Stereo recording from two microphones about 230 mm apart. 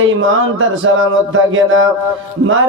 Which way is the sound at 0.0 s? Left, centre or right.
Right.